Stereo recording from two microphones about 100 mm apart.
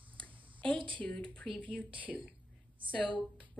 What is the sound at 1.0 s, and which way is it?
Speech, 15° left (ahead or behind).